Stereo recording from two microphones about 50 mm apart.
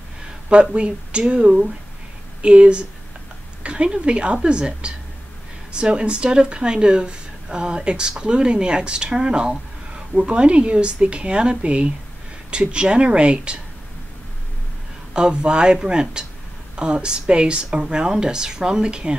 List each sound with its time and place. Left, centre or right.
0.5 s a woman's voice: right
15.1 s speech: centre